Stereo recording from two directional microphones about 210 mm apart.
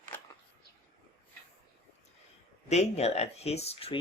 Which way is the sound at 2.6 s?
30° left (ahead or behind).